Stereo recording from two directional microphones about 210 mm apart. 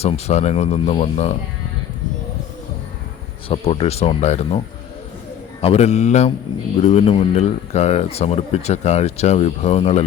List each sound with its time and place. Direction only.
0.0 s speech: 30° left (ahead or behind)
3.5 s speech: 30° left (ahead or behind)